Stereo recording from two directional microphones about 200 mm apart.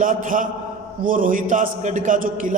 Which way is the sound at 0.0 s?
40° right (ahead or behind).